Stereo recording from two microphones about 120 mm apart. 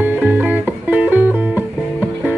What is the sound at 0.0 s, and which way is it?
Music, 15° right (ahead or behind).